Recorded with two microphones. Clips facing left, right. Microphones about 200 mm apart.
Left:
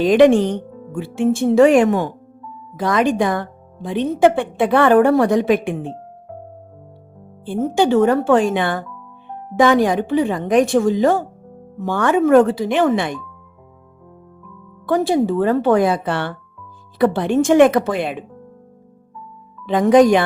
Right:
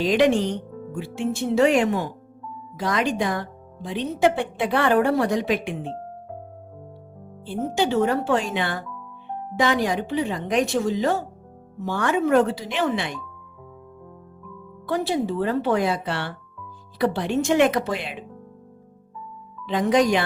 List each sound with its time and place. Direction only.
0.0 s speech: 55° left (ahead or behind)
7.4 s speech: 50° left (ahead or behind)
14.8 s speech: 45° left (ahead or behind)
19.6 s speech: 50° left (ahead or behind)